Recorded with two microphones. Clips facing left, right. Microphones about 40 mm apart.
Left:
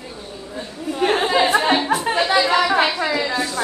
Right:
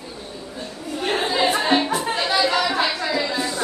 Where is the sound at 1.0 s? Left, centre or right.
Left.